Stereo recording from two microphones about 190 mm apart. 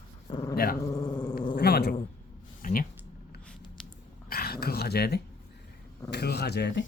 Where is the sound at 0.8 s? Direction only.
15° left (ahead or behind).